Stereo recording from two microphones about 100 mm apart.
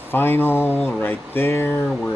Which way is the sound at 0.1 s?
20° left (ahead or behind).